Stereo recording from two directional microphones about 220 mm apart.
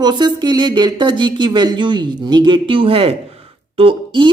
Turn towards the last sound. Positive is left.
turn(degrees=-25)  # may be behind; listen again after turning